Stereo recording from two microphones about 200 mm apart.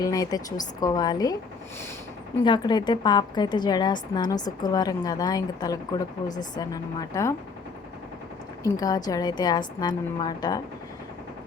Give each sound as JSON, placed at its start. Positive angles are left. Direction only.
{"t": 0.0, "sound": "a woman's voice", "side_deg": 20}
{"t": 2.4, "sound": "a woman's voice", "side_deg": 20}
{"t": 8.6, "sound": "a woman's voice", "side_deg": 20}